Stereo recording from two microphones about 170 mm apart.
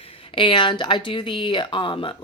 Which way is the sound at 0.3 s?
30° left (ahead or behind).